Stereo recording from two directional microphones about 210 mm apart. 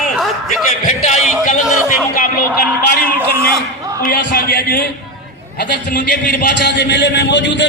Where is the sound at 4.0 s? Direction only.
45° left (ahead or behind).